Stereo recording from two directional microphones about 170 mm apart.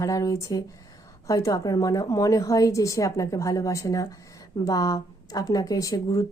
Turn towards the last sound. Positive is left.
turn(degrees=20)  # may be behind; listen again after turning